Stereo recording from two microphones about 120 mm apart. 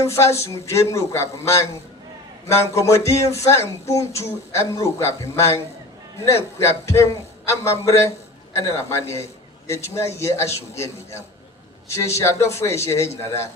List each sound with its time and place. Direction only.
0.0 s a man's voice: 25° left (ahead or behind)